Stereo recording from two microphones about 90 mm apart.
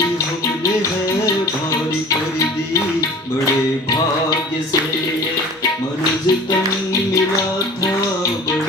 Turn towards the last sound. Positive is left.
turn(degrees=40)  # may be behind; listen again after turning